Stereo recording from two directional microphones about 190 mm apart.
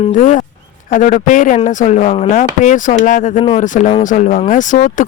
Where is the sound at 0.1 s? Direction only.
45° left (ahead or behind).